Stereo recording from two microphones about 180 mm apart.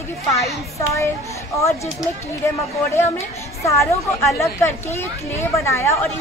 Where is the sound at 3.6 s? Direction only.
15° left (ahead or behind).